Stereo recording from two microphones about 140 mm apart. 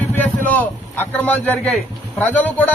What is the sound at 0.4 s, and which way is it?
A man's voice, 10° left (ahead or behind).